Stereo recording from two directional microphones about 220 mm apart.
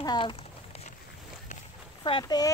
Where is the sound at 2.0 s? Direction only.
20° left (ahead or behind).